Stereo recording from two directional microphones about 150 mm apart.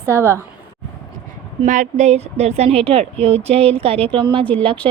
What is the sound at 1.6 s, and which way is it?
A woman's voice, 55° right (ahead or behind).